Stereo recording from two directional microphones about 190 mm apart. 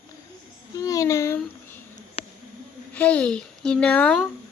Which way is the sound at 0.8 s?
20° left (ahead or behind).